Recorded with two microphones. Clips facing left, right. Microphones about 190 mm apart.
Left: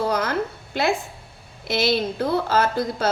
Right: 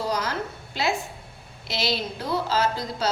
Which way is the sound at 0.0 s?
55° left (ahead or behind).